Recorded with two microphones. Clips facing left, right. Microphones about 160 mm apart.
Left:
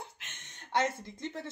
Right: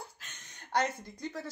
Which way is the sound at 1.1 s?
25° left (ahead or behind).